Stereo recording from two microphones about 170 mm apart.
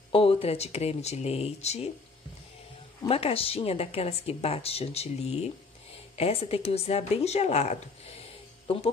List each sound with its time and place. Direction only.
0.1 s speech: 35° left (ahead or behind)
3.1 s speech: 35° left (ahead or behind)